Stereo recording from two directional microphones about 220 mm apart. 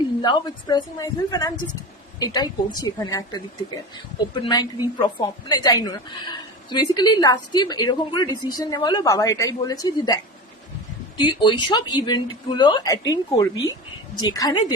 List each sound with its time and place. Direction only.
0.2 s a woman's voice: 20° left (ahead or behind)
11.2 s speech: 20° left (ahead or behind)